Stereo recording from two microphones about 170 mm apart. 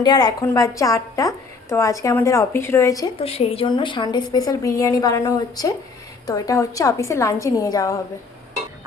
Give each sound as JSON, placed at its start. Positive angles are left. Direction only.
{"t": 0.0, "sound": "a woman's voice", "side_deg": 25}
{"t": 3.2, "sound": "a woman's voice", "side_deg": 35}